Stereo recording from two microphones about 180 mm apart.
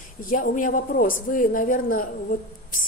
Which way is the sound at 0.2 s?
50° left (ahead or behind).